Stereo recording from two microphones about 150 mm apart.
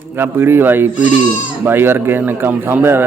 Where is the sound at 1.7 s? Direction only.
15° right (ahead or behind).